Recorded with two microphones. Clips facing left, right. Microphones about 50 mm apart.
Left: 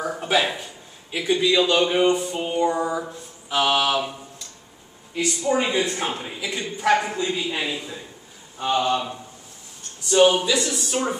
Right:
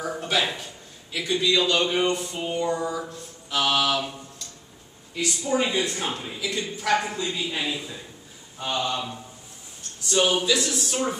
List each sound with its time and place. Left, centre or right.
0.0 s speech: centre
5.2 s speech: centre